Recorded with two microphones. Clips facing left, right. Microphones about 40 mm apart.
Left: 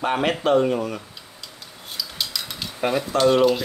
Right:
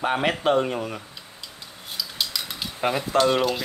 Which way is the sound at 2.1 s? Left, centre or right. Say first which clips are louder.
Even; centre.